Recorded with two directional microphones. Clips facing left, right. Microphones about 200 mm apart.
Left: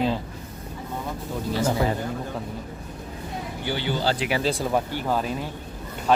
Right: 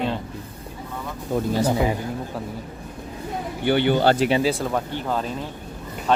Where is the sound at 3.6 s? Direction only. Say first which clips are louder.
Right 8 dB; 60° right (ahead or behind).